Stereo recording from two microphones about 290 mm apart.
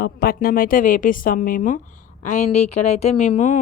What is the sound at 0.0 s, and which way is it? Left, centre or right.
Speech, left.